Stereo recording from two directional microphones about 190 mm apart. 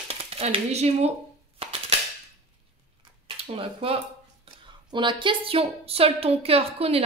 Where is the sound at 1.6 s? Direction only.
30° right (ahead or behind).